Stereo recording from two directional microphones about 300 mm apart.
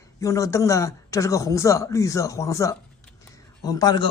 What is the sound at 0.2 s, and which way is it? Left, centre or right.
Speech, centre.